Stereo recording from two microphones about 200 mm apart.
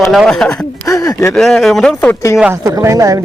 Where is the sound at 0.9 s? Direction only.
15° left (ahead or behind).